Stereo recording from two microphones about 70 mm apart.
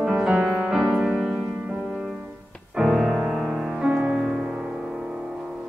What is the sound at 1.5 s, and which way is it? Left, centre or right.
Music, right.